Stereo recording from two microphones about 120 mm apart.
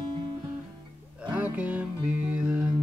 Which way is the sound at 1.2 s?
10° right (ahead or behind).